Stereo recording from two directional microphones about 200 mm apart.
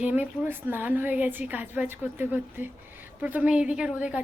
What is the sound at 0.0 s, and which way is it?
A woman's voice, 10° right (ahead or behind).